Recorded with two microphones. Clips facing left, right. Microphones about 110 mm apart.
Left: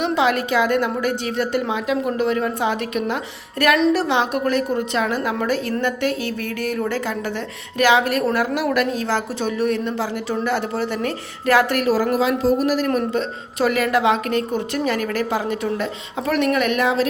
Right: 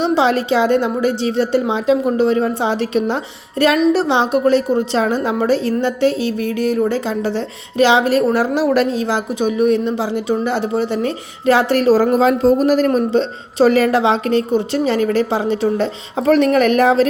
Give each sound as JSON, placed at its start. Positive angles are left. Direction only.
{"t": 0.0, "sound": "a woman's voice", "side_deg": -30}